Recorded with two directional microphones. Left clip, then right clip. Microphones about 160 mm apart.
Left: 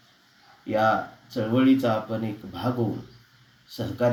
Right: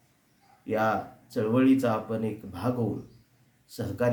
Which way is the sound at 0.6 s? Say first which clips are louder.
Left 4 dB; 20° right (ahead or behind).